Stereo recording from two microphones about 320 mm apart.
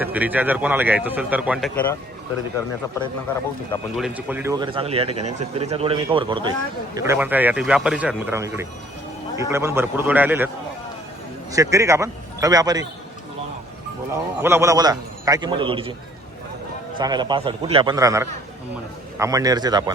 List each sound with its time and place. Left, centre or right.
0.0 s a man's voice: centre
3.7 s a man's voice: centre
11.5 s speech: centre
14.1 s speech: centre
17.0 s speech: centre